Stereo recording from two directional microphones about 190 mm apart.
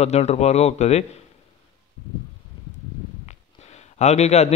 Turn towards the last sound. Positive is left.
turn(degrees=35)  # may be behind; listen again after turning